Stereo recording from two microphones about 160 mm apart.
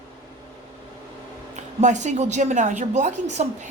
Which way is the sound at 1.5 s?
45° right (ahead or behind).